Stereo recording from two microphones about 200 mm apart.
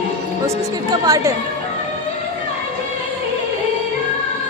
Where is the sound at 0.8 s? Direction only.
20° right (ahead or behind).